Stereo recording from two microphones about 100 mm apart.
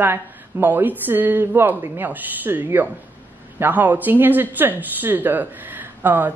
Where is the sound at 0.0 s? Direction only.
20° right (ahead or behind).